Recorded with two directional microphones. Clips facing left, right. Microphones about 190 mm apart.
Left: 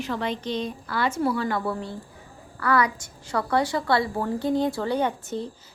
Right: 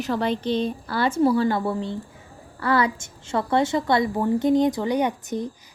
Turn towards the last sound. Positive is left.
turn(degrees=-15)  # may be behind; listen again after turning